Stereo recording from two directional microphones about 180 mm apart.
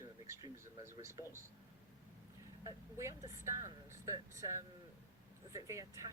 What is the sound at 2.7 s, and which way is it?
Speech, 15° right (ahead or behind).